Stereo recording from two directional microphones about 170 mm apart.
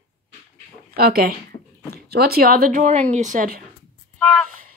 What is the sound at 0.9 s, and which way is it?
Speech, 60° right (ahead or behind).